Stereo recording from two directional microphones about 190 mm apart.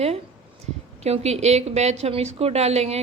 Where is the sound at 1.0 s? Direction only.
35° right (ahead or behind).